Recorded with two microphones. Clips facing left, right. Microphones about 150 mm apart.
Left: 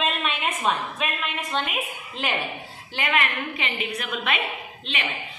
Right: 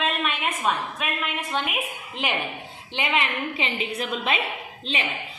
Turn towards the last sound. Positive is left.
turn(degrees=-35)  # may be behind; listen again after turning